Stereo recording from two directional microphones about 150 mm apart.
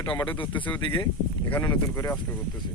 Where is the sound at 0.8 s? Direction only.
35° left (ahead or behind).